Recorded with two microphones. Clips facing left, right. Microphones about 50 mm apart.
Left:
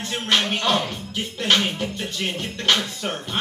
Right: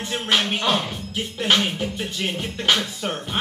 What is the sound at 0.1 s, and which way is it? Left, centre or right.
Speech, centre.